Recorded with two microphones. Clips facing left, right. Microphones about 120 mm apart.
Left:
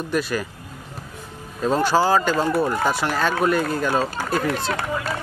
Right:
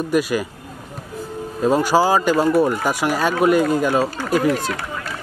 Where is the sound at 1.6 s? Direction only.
10° right (ahead or behind).